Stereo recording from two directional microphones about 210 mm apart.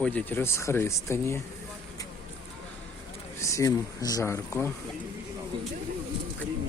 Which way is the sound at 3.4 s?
15° left (ahead or behind).